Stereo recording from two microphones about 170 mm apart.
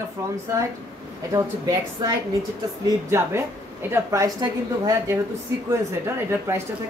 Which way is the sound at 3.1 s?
15° right (ahead or behind).